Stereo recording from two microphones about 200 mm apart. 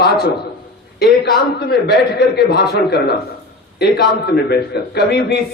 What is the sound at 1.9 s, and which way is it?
A man's voice, 55° left (ahead or behind).